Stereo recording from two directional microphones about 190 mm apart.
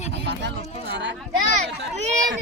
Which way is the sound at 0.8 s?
65° right (ahead or behind).